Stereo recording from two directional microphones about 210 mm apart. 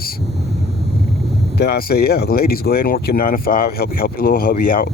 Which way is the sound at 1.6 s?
50° left (ahead or behind).